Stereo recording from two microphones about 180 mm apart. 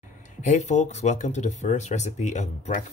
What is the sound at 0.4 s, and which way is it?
Speech, 40° left (ahead or behind).